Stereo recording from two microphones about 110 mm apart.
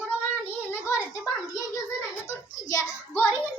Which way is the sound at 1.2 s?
30° left (ahead or behind).